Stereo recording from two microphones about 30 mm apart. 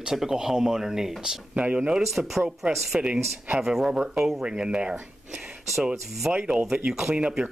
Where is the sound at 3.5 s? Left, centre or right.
Centre.